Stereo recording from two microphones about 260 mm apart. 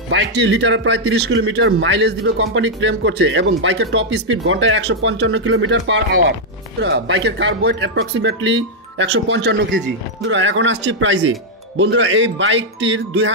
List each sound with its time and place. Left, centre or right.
0.1 s a man's voice: right